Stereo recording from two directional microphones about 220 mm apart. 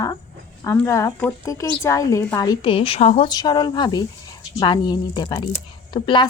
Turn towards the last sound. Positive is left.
turn(degrees=20)  # may be behind; listen again after turning